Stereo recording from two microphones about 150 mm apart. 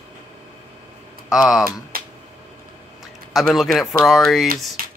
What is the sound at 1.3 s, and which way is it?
Speech, 5° right (ahead or behind).